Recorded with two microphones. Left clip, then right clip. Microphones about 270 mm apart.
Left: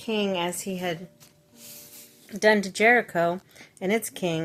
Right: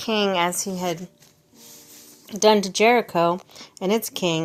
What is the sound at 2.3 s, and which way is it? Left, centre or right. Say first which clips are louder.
Speech: right 4 dB; centre.